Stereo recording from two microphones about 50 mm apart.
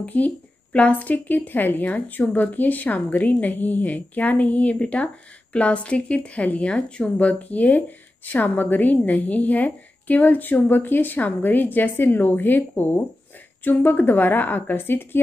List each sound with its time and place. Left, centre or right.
0.0 s a woman's voice: left